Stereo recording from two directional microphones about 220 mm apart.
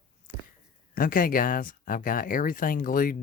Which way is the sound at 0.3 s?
40° left (ahead or behind).